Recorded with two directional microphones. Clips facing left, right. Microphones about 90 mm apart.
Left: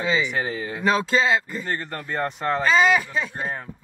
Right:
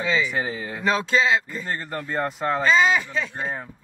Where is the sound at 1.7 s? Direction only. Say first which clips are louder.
Even; 10° right (ahead or behind).